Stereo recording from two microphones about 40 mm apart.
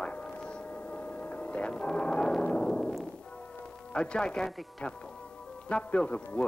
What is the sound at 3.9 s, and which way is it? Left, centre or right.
Speech, left.